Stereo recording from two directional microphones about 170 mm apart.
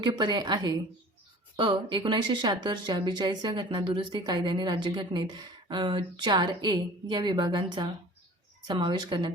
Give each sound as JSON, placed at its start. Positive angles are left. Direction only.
{"t": 0.0, "sound": "speech", "side_deg": -25}